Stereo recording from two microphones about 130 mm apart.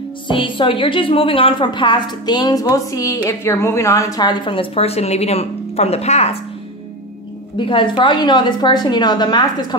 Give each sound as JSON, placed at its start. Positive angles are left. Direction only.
{"t": 0.3, "sound": "a woman's voice", "side_deg": 40}
{"t": 7.5, "sound": "a woman's voice", "side_deg": 40}